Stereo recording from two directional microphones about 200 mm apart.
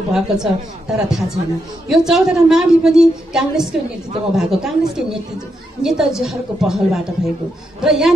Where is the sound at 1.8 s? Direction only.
Centre (ahead or behind).